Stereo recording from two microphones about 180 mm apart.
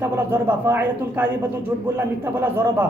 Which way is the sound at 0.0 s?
10° right (ahead or behind).